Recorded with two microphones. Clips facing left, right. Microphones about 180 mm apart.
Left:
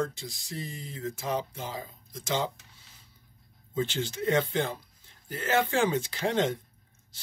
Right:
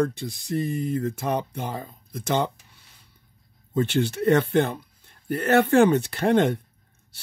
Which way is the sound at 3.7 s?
65° right (ahead or behind).